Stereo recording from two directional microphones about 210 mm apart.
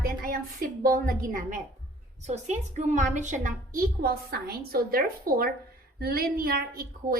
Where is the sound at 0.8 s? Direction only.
45° right (ahead or behind).